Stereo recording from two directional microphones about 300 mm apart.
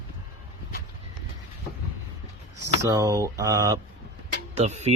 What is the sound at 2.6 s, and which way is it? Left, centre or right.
Speech, centre.